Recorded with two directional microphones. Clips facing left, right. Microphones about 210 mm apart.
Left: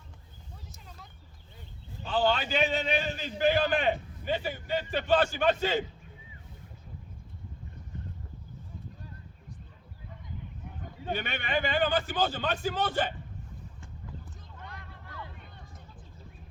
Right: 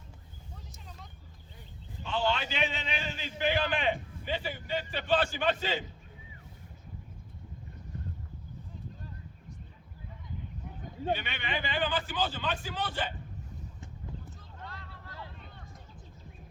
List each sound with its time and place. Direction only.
2.0 s a man's voice: 35° left (ahead or behind)
11.1 s a man's voice: 45° left (ahead or behind)
14.6 s vehicle: 15° left (ahead or behind)